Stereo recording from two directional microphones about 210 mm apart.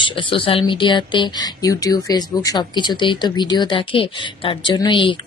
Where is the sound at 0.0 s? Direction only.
25° left (ahead or behind).